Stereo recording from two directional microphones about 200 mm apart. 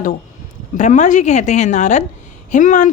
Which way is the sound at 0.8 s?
35° left (ahead or behind).